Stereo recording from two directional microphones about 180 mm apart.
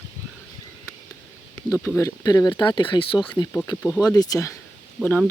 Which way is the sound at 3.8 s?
20° left (ahead or behind).